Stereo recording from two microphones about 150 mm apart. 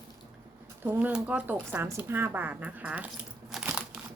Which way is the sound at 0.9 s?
10° right (ahead or behind).